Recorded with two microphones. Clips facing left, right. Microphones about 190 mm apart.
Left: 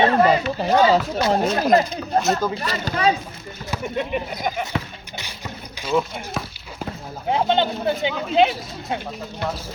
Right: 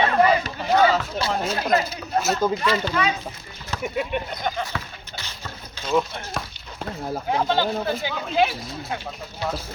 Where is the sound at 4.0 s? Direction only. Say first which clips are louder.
Left 2 dB; 5° left (ahead or behind).